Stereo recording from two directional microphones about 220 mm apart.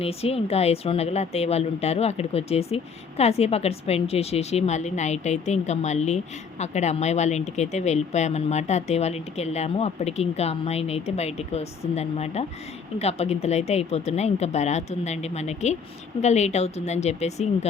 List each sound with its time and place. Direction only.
0.0 s a woman's voice: 25° left (ahead or behind)